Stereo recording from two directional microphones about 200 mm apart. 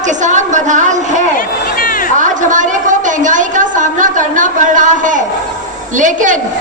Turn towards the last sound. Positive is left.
turn(degrees=-40)  # may be behind; listen again after turning